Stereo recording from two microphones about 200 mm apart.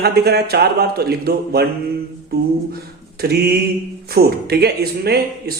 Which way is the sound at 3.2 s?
50° right (ahead or behind).